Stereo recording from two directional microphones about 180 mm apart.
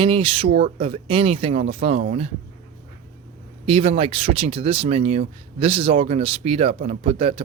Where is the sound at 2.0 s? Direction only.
45° right (ahead or behind).